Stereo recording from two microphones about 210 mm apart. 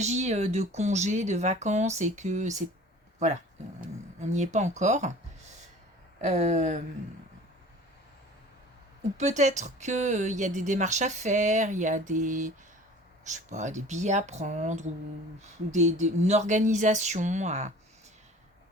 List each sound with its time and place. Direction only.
0.0 s speech: 35° right (ahead or behind)
4.2 s speech: 35° right (ahead or behind)
6.2 s speech: 35° right (ahead or behind)
9.1 s speech: 35° right (ahead or behind)